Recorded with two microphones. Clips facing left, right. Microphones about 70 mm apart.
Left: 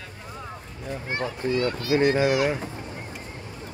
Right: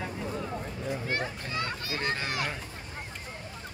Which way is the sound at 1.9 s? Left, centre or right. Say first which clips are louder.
Left 15 dB; left.